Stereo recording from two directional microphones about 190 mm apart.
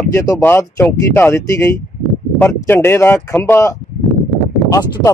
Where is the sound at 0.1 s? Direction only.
15° left (ahead or behind).